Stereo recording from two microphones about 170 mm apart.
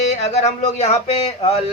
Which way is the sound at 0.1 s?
45° left (ahead or behind).